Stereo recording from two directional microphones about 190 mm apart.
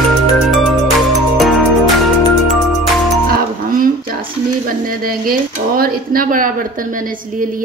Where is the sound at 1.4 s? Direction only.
Centre (ahead or behind).